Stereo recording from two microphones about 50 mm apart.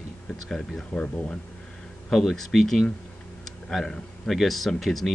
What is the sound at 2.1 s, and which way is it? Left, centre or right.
Speech, centre.